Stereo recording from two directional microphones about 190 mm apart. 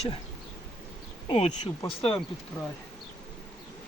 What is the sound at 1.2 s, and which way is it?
Speech, 30° left (ahead or behind).